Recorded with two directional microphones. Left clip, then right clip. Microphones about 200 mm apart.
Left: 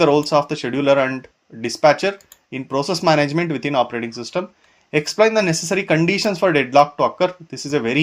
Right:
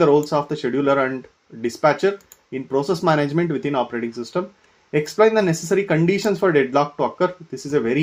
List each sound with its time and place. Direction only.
0.0 s speech: 25° left (ahead or behind)